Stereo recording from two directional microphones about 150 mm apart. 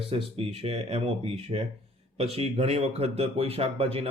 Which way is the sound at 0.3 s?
40° right (ahead or behind).